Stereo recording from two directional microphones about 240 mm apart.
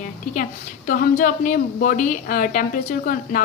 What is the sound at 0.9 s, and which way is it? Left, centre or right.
A woman's voice, left.